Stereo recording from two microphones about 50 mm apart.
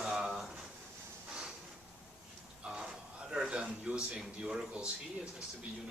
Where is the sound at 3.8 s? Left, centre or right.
Centre.